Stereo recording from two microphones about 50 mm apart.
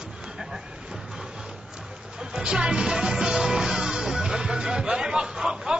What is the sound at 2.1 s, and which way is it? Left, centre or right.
Music, centre.